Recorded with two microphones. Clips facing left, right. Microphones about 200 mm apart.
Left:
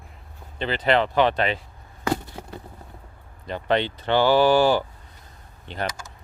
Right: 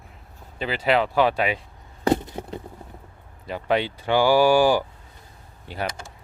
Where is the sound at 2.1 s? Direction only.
20° right (ahead or behind).